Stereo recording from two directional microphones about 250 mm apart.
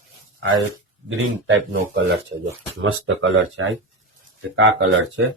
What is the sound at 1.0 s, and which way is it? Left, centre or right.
Speech, right.